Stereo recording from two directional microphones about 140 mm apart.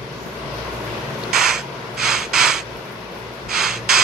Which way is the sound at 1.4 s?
5° right (ahead or behind).